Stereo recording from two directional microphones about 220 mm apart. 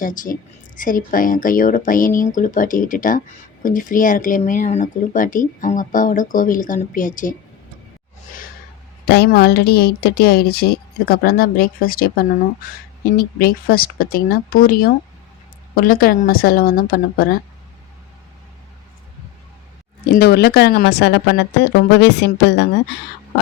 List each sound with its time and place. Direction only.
0.0 s speech: 40° left (ahead or behind)
9.0 s speech: 45° left (ahead or behind)
20.1 s speech: 45° left (ahead or behind)